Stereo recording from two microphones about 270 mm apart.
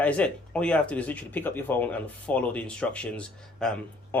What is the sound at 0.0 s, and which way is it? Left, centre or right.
Speech, centre.